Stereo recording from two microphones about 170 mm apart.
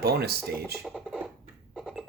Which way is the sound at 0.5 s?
5° right (ahead or behind).